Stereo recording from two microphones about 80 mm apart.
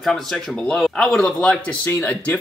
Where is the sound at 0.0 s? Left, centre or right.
Centre.